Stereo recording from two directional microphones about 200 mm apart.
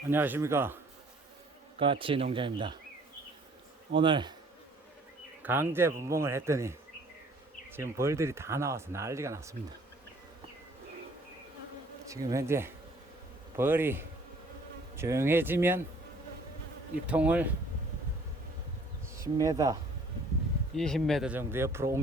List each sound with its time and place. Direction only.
0.1 s speech: 10° right (ahead or behind)
1.8 s speech: 25° right (ahead or behind)
3.9 s speech: 25° right (ahead or behind)
5.4 s speech: 10° right (ahead or behind)
12.0 s speech: 15° right (ahead or behind)
17.1 s speech: 5° right (ahead or behind)
19.1 s speech: 15° right (ahead or behind)
20.7 s speech: centre (ahead or behind)